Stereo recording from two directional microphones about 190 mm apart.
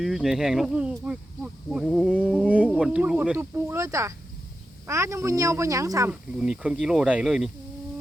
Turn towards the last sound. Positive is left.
turn(degrees=-5)  # may be behind; listen again after turning